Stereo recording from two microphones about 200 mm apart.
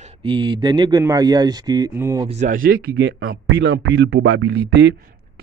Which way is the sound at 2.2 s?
35° right (ahead or behind).